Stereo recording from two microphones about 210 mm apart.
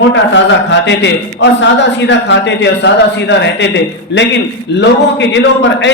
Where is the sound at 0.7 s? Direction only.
55° left (ahead or behind).